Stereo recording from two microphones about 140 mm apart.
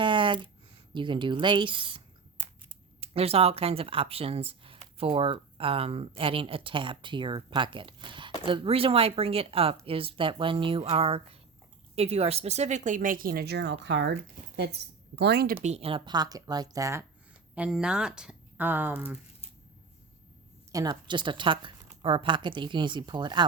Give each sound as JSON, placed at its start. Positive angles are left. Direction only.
{"t": 0.0, "sound": "a sound", "side_deg": -35}
{"t": 0.9, "sound": "speech", "side_deg": -35}
{"t": 3.0, "sound": "a woman's voice", "side_deg": -45}
{"t": 15.5, "sound": "speech", "side_deg": -45}
{"t": 17.5, "sound": "speech", "side_deg": -10}
{"t": 20.7, "sound": "speech", "side_deg": -30}